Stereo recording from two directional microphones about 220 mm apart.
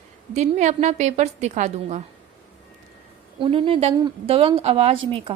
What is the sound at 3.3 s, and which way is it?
A woman's voice, 20° right (ahead or behind).